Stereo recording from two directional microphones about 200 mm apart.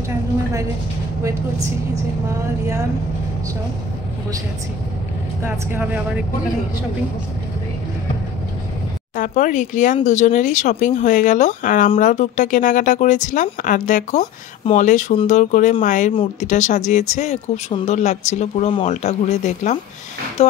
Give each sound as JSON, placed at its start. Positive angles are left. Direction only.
{"t": 5.4, "sound": "speech", "side_deg": -10}
{"t": 9.1, "sound": "speech", "side_deg": 40}